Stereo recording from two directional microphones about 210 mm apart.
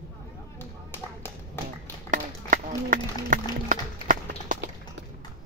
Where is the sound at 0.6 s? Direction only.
10° left (ahead or behind).